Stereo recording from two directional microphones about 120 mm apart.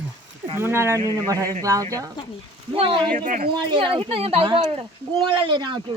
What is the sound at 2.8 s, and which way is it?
A woman's voice, 45° right (ahead or behind).